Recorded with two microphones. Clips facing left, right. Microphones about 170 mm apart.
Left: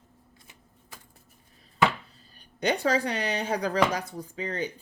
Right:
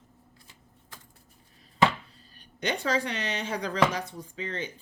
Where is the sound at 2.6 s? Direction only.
35° left (ahead or behind).